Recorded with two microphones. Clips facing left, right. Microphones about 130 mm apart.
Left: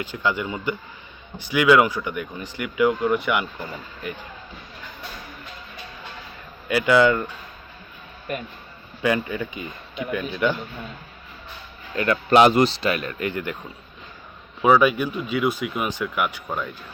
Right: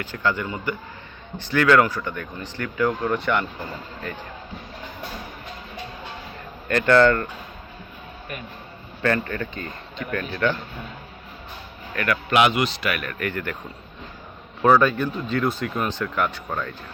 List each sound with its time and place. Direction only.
0.0 s speech: 15° left (ahead or behind)
6.7 s speech: 10° left (ahead or behind)
9.0 s speech: 10° left (ahead or behind)
11.9 s speech: 25° left (ahead or behind)
14.6 s speech: 10° left (ahead or behind)